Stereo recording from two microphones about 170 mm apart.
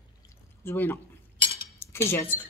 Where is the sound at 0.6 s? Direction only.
10° left (ahead or behind).